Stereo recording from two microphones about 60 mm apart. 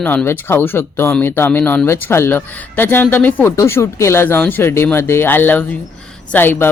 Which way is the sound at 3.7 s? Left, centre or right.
Left.